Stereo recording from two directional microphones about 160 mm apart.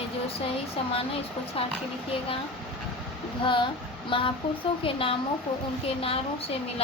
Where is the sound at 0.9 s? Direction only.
35° left (ahead or behind).